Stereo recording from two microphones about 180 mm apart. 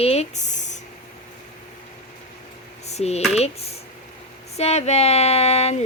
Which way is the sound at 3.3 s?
35° left (ahead or behind).